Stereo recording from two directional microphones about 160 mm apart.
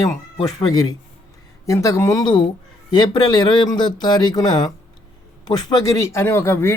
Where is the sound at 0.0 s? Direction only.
25° left (ahead or behind).